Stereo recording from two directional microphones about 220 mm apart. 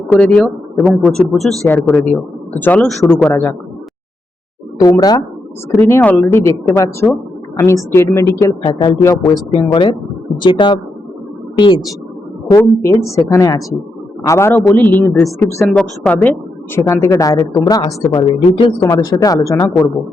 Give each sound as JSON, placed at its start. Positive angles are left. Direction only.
{"t": 0.1, "sound": "speech", "side_deg": 5}
{"t": 4.8, "sound": "speech", "side_deg": 15}
{"t": 5.8, "sound": "speech", "side_deg": 5}
{"t": 9.5, "sound": "a woman's voice", "side_deg": 25}